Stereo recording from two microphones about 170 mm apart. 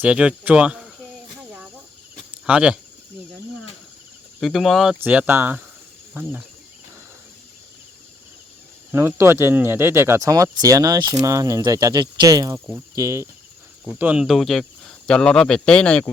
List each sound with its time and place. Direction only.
0.0 s speech: 5° right (ahead or behind)
2.5 s speech: 5° right (ahead or behind)
4.4 s speech: centre (ahead or behind)
8.9 s speech: 15° right (ahead or behind); by 16.0 s 5° left (ahead or behind)